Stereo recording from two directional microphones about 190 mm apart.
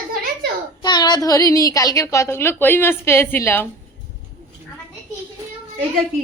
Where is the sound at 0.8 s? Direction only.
20° left (ahead or behind).